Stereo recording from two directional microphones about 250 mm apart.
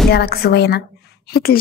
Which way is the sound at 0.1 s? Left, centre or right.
Left.